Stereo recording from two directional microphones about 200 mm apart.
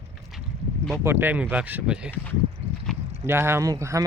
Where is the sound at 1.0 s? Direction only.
10° right (ahead or behind).